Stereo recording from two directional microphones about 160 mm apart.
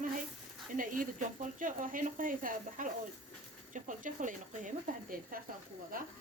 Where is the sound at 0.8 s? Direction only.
55° right (ahead or behind).